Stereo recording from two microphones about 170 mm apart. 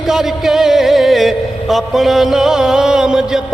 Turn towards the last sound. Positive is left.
turn(degrees=-5)  # may be behind; listen again after turning